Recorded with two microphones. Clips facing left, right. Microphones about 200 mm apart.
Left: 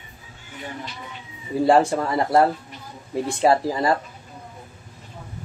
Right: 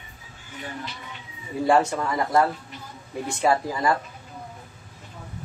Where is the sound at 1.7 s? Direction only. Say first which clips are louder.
Left 3 dB; 30° left (ahead or behind).